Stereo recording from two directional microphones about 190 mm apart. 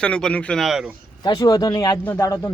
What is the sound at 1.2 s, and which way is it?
Speech, 20° left (ahead or behind).